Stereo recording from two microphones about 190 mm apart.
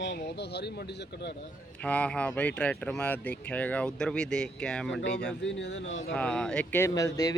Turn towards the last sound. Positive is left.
turn(degrees=15)  # may be behind; listen again after turning